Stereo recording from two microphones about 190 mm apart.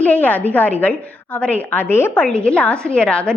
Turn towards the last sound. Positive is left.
turn(degrees=5)  # may be behind; listen again after turning